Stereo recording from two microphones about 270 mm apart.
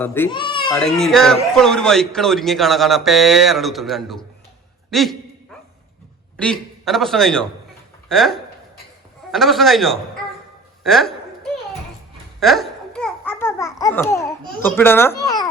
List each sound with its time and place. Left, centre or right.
0.0 s speech: centre
0.8 s a man's voice: centre
6.3 s a man's voice: centre
12.4 s babbling: centre
14.6 s a child's voice: centre